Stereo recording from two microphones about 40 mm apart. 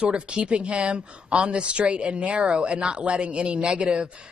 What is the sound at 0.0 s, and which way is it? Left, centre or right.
Speech, right.